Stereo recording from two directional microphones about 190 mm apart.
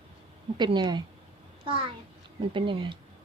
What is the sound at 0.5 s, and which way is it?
Speech, 20° right (ahead or behind).